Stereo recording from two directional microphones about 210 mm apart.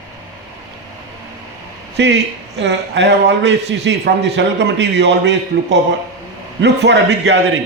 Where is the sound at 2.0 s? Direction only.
55° right (ahead or behind).